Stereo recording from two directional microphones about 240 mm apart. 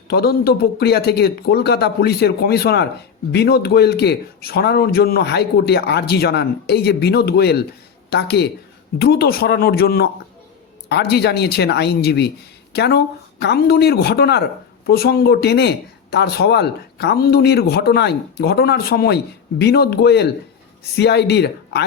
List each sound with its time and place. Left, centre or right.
0.1 s speech: left